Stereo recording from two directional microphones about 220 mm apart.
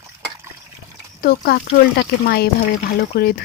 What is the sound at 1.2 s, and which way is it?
Speech, 45° left (ahead or behind).